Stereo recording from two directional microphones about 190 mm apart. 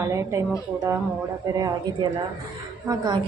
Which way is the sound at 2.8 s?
20° right (ahead or behind).